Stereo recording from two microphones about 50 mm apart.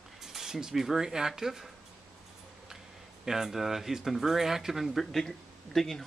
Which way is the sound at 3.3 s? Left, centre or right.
Centre.